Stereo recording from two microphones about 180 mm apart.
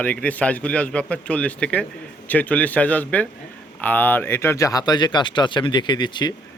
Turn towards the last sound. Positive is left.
turn(degrees=25)  # may be behind; listen again after turning